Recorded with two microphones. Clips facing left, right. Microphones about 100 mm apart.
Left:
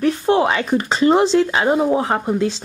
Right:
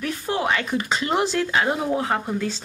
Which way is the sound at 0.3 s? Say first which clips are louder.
Left 10 dB; 60° left (ahead or behind).